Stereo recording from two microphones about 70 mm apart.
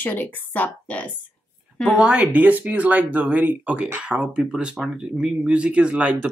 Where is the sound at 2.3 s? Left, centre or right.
Right.